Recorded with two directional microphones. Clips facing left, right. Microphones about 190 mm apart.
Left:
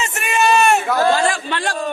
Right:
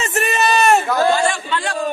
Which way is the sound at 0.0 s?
35° right (ahead or behind).